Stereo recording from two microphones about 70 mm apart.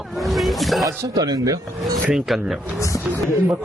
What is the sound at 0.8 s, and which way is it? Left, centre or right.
Speech, right.